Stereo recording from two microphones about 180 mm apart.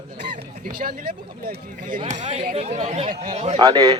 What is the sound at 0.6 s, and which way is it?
A man's voice, 50° right (ahead or behind).